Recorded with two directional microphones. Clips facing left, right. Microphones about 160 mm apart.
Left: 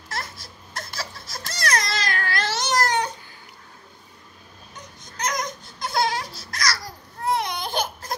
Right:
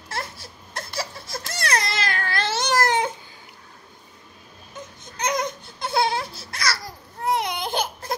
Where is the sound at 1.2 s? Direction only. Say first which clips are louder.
Even; 25° right (ahead or behind).